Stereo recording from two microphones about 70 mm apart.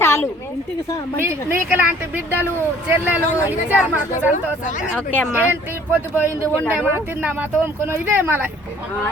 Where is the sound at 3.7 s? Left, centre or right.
Right.